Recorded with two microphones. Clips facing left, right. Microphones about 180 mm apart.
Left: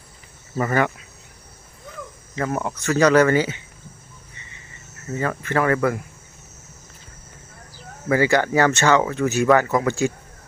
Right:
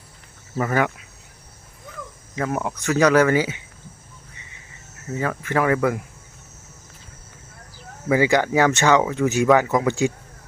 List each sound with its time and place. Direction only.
0.5 s speech: 5° right (ahead or behind)
2.3 s speech: 5° right (ahead or behind)
5.1 s speech: 5° right (ahead or behind)
8.0 s speech: 15° right (ahead or behind)